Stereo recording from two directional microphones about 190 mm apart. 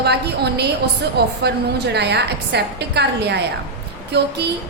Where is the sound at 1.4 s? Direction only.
60° right (ahead or behind).